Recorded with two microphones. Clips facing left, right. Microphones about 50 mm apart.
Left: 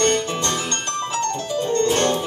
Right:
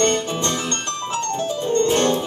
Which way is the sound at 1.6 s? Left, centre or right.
Right.